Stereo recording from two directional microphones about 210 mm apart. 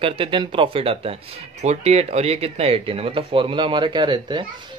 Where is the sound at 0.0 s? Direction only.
25° right (ahead or behind).